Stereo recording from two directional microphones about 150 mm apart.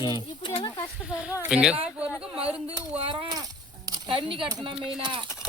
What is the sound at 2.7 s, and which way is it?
Speech, 30° right (ahead or behind).